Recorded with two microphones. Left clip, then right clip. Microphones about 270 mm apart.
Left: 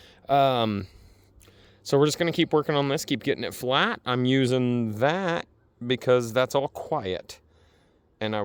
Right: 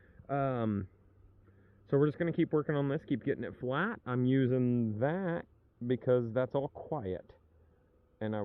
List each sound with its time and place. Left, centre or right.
0.0 s speech: centre
1.9 s speech: centre